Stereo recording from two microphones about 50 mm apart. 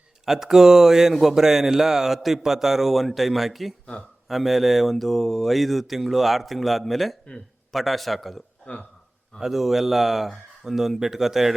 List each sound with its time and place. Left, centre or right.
0.3 s speech: centre
8.6 s speech: left
9.4 s speech: centre